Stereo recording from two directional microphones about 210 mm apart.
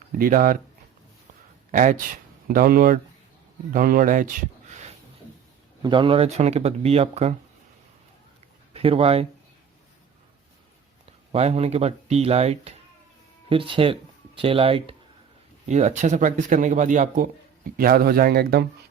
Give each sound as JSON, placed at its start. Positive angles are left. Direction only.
{"t": 0.2, "sound": "speech", "side_deg": -40}
{"t": 1.7, "sound": "speech", "side_deg": -35}
{"t": 4.7, "sound": "a sound", "side_deg": -30}
{"t": 5.8, "sound": "speech", "side_deg": -25}
{"t": 8.7, "sound": "speech", "side_deg": -25}
{"t": 11.3, "sound": "speech", "side_deg": -30}